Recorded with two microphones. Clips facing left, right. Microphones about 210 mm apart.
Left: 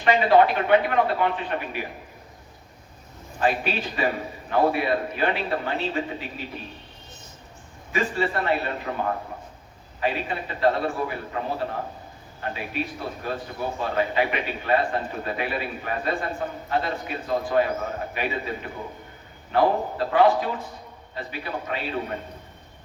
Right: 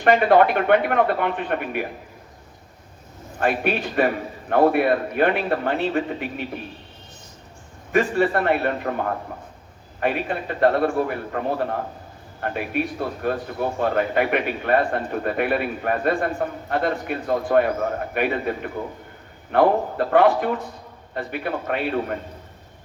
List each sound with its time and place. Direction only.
0.0 s a man's voice: 55° right (ahead or behind)
3.4 s a man's voice: 55° right (ahead or behind)
7.9 s a man's voice: 55° right (ahead or behind)
10.0 s a man's voice: 55° right (ahead or behind)